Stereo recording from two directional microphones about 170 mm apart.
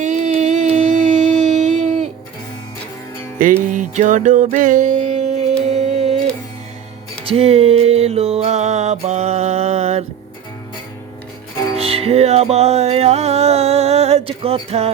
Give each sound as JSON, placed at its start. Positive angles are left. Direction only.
{"t": 0.0, "sound": "a sound", "side_deg": -45}
{"t": 3.4, "sound": "music", "side_deg": -55}
{"t": 7.3, "sound": "music", "side_deg": -35}
{"t": 11.8, "sound": "music", "side_deg": -35}